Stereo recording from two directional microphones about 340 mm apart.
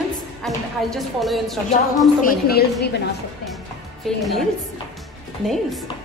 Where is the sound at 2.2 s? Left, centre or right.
Left.